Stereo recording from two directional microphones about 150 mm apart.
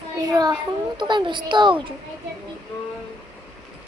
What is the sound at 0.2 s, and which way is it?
A child's voice, 25° right (ahead or behind).